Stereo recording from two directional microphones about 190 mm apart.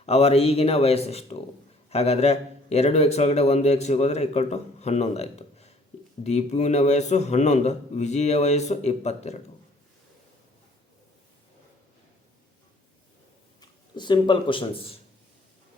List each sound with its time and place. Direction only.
0.0 s a man's voice: 30° left (ahead or behind)
13.6 s speech: 25° left (ahead or behind)